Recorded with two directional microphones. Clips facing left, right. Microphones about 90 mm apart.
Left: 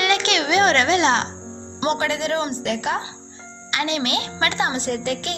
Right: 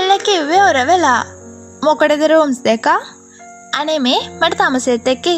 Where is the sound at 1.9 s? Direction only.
55° right (ahead or behind); by 3.0 s 75° right (ahead or behind).